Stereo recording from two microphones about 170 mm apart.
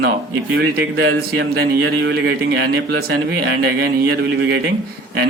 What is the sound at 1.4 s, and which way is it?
A man's voice, 80° right.